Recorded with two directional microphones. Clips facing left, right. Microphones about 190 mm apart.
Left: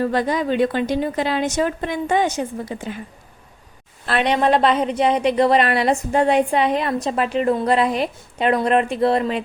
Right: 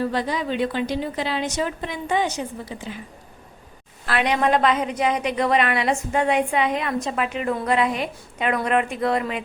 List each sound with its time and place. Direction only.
0.0 s a woman's voice: 50° left (ahead or behind)
4.0 s a woman's voice: 30° left (ahead or behind)